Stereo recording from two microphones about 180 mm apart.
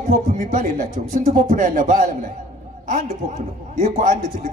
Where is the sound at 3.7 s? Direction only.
45° right (ahead or behind).